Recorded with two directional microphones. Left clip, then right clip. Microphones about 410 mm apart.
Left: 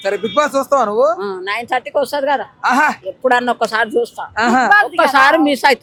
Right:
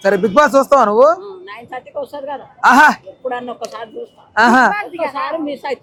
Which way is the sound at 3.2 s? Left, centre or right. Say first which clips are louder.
Left 10 dB; left.